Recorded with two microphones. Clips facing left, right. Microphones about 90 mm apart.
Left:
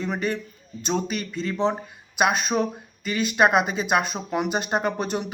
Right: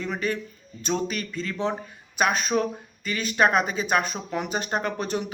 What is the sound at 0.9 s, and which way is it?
Speech, 10° left (ahead or behind).